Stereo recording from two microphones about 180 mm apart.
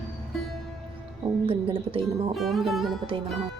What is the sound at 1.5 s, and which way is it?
Speech, 30° right (ahead or behind).